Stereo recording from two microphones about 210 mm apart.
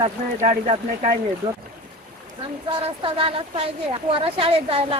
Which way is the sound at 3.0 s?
25° right (ahead or behind).